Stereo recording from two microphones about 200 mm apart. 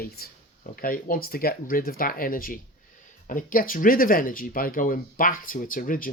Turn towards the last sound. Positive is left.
turn(degrees=45)  # may be behind; listen again after turning